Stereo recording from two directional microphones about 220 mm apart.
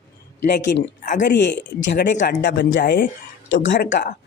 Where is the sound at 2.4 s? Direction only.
50° left (ahead or behind).